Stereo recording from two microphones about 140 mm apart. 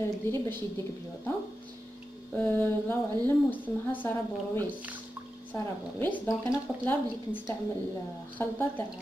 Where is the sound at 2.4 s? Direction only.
15° left (ahead or behind).